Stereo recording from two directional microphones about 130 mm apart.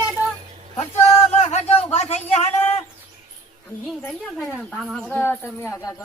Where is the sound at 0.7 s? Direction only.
55° left (ahead or behind).